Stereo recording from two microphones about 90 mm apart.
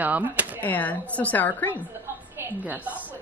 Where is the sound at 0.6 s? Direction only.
20° left (ahead or behind).